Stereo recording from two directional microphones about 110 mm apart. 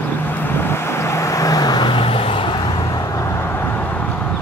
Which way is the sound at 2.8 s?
30° left (ahead or behind).